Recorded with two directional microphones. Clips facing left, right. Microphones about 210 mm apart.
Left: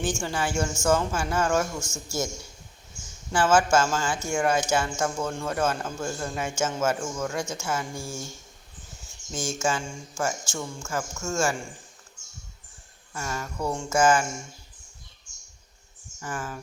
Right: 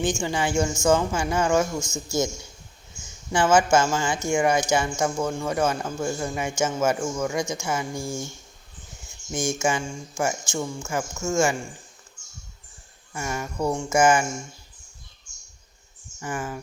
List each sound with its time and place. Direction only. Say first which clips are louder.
0.0 s speech: right 3 dB; 15° right (ahead or behind)
3.3 s speech: right 2 dB; 20° right (ahead or behind)
9.3 s speech: right 3 dB; 15° right (ahead or behind)
13.1 s speech: right 4 dB; 15° right (ahead or behind)
16.2 s speech: right 3 dB; 15° right (ahead or behind)